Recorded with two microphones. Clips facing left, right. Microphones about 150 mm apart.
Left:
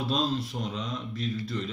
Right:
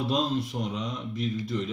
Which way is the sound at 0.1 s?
20° right (ahead or behind).